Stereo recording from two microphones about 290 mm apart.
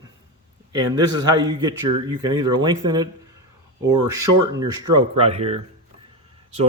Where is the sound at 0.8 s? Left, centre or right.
Centre.